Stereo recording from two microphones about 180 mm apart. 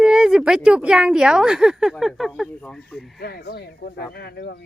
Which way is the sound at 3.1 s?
60° left (ahead or behind).